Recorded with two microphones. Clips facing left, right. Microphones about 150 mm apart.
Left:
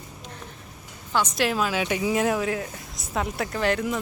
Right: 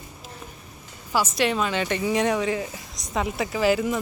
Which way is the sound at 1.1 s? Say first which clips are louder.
Right 1 dB; 5° right (ahead or behind).